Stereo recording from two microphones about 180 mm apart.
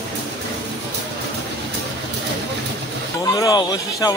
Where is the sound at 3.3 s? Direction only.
20° left (ahead or behind).